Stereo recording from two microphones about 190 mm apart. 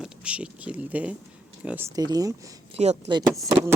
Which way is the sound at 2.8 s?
35° right (ahead or behind).